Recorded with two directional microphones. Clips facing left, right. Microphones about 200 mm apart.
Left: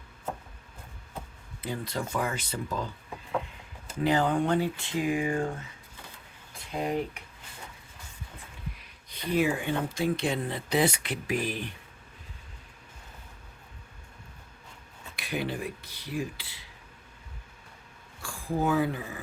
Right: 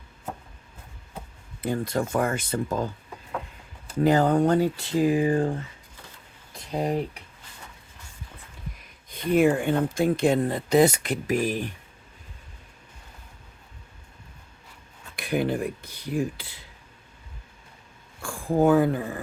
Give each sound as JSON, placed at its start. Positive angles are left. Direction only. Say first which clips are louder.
{"t": 1.6, "sound": "speech", "louder": "right 7 dB", "side_deg": -50}
{"t": 4.0, "sound": "speech", "louder": "right 5 dB", "side_deg": -45}
{"t": 6.7, "sound": "speech", "louder": "right 4 dB", "side_deg": -35}
{"t": 8.8, "sound": "speech", "louder": "right 10 dB", "side_deg": -50}
{"t": 15.1, "sound": "cutlery", "louder": "right 7 dB", "side_deg": -50}
{"t": 18.2, "sound": "speech", "louder": "right 8 dB", "side_deg": -50}